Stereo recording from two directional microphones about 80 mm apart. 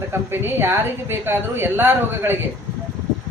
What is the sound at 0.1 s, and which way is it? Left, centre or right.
A man's voice, right.